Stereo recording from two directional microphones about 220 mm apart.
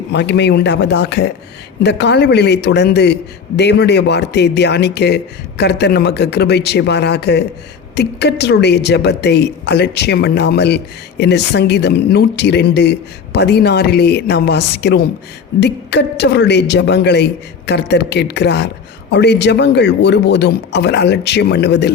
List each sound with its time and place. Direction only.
0.1 s a woman's voice: 50° left (ahead or behind)